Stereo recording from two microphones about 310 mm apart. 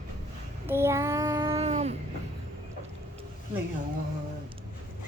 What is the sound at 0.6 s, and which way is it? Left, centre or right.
Child singing, centre.